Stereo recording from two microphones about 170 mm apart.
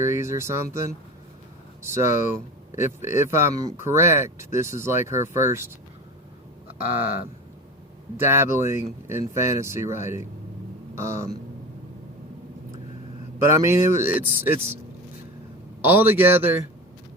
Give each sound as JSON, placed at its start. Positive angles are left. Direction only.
{"t": 0.0, "sound": "speech", "side_deg": -15}
{"t": 8.1, "sound": "speech", "side_deg": -15}
{"t": 13.4, "sound": "speech", "side_deg": -15}
{"t": 15.9, "sound": "speech", "side_deg": -10}